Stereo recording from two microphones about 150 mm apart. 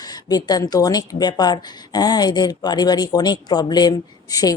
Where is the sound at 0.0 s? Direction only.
25° left (ahead or behind).